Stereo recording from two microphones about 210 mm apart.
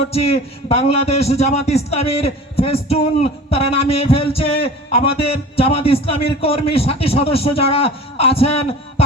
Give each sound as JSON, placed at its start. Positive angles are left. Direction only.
{"t": 0.0, "sound": "a man's voice", "side_deg": 30}